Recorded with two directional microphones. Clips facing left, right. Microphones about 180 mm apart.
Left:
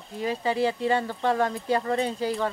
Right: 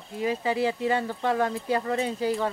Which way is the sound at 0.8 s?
30° left (ahead or behind).